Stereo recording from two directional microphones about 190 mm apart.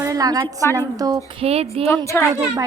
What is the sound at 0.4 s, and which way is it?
Speech, 10° left (ahead or behind).